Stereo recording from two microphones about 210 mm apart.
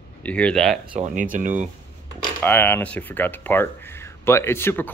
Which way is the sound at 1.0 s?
35° right (ahead or behind).